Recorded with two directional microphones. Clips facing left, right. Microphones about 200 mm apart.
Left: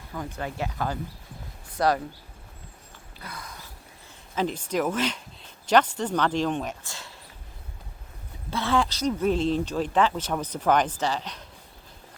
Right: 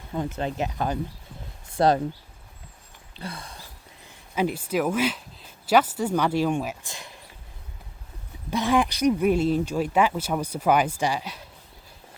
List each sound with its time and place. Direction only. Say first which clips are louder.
0.3 s speech: even; 20° right (ahead or behind)
3.2 s a sound: right 4 dB; 30° right (ahead or behind)
4.4 s speech: right 2 dB; 10° right (ahead or behind)
8.4 s speech: right 3 dB; 15° right (ahead or behind)